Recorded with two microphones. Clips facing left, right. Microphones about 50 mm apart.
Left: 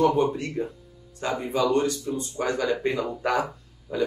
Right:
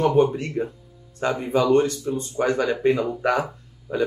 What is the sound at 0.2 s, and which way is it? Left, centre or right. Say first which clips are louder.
Speech: right 4 dB; right.